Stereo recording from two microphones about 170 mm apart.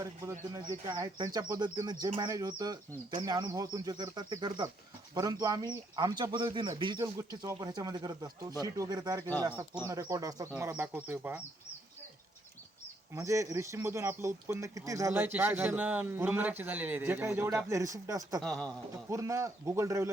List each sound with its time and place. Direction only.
0.0 s speech: 20° right (ahead or behind)
13.1 s speech: 20° right (ahead or behind)
18.4 s a man's voice: 5° left (ahead or behind)
19.1 s speech: 20° right (ahead or behind)